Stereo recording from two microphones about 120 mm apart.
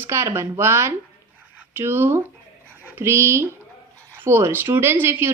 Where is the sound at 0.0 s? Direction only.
25° right (ahead or behind).